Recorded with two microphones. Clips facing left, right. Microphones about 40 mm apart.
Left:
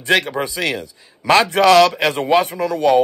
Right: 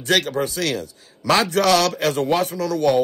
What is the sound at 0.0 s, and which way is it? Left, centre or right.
A man's voice, left.